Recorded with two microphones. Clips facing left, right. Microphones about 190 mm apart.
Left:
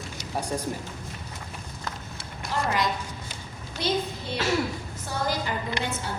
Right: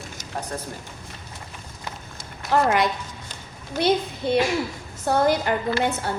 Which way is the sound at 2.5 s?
60° right (ahead or behind).